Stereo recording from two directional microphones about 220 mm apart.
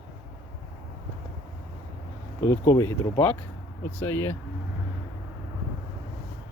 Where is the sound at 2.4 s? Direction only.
15° left (ahead or behind).